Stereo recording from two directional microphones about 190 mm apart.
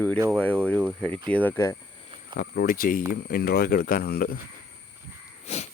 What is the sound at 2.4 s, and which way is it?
Speech, 55° left (ahead or behind).